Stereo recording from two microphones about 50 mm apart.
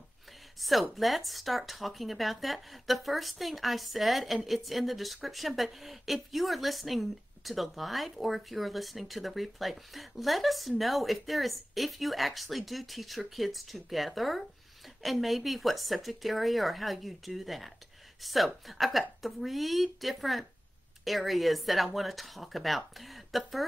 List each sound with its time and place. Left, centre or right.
0.6 s speech: centre